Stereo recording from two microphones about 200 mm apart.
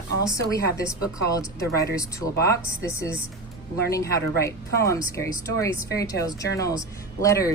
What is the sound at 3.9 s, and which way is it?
Speech, 15° left (ahead or behind).